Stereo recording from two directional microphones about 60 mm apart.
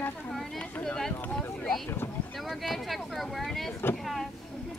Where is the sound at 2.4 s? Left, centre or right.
Centre.